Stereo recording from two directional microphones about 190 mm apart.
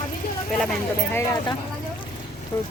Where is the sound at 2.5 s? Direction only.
10° left (ahead or behind).